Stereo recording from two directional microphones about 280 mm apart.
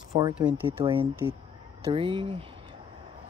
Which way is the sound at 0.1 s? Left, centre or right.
Centre.